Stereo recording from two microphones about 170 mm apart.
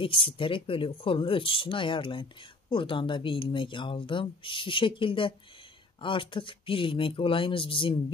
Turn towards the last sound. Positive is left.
turn(degrees=30)  # may be behind; listen again after turning